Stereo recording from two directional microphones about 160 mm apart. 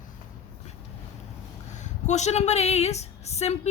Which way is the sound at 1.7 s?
45° left (ahead or behind).